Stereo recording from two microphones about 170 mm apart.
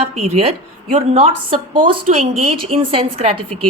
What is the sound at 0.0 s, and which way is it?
A woman's voice, 35° right (ahead or behind).